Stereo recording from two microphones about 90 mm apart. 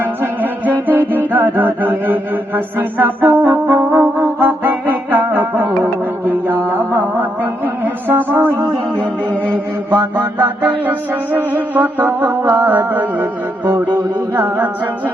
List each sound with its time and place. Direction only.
0.0 s music: 20° right (ahead or behind)
9.0 s humming: 15° left (ahead or behind)
9.9 s music: 20° right (ahead or behind)
14.3 s singing: 20° right (ahead or behind)